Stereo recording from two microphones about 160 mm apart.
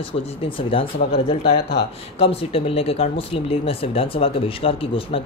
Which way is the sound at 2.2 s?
40° left (ahead or behind).